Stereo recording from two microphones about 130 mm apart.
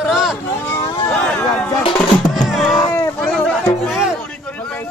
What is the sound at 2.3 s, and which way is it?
Music, centre (ahead or behind).